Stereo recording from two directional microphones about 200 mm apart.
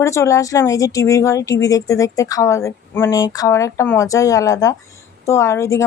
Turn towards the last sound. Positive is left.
turn(degrees=15)  # may be behind; listen again after turning